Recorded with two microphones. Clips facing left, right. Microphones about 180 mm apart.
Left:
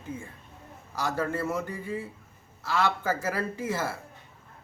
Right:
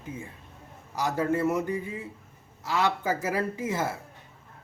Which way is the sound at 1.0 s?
15° right (ahead or behind).